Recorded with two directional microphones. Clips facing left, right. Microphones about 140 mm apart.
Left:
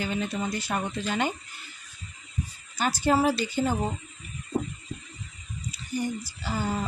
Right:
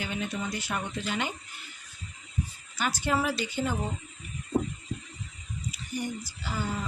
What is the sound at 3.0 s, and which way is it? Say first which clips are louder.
Speech: left 6 dB; 35° left (ahead or behind).